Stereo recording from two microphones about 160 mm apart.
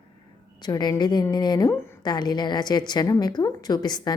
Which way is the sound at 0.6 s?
25° left (ahead or behind).